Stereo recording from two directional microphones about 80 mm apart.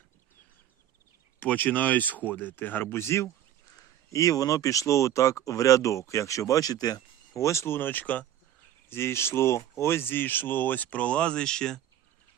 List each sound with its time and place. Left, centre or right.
1.4 s speech: left
7.4 s speech: left
8.9 s speech: left; by 11.8 s centre